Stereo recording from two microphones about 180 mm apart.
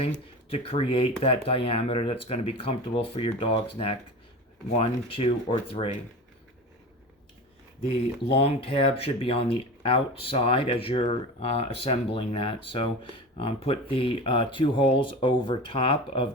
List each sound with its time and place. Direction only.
0.0 s speech: 30° left (ahead or behind)
8.3 s speech: 35° left (ahead or behind)